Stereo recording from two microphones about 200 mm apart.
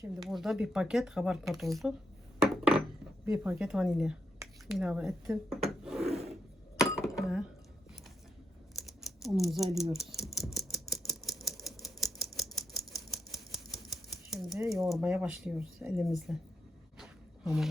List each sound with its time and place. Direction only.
0.2 s speech: centre (ahead or behind)
2.4 s a sound: centre (ahead or behind)
3.2 s speech: 5° right (ahead or behind)
5.6 s wood: centre (ahead or behind)
6.0 s filing: 30° right (ahead or behind)
6.7 s chink: 15° left (ahead or behind)
7.2 s chink: 5° right (ahead or behind)
9.2 s speech: centre (ahead or behind)
9.9 s a sound: centre (ahead or behind)
14.7 s speech: centre (ahead or behind)
17.0 s a sound: centre (ahead or behind)